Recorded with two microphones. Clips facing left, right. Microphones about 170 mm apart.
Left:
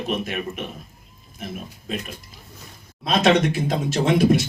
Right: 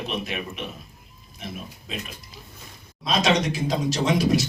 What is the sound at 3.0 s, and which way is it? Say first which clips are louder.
Speech: left 4 dB; 55° left (ahead or behind).